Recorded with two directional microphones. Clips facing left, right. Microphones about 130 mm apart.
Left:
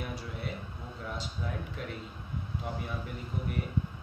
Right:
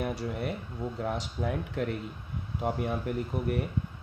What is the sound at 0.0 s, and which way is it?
Speech, 65° right (ahead or behind).